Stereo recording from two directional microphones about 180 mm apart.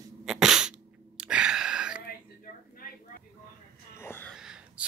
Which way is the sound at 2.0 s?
55° left (ahead or behind).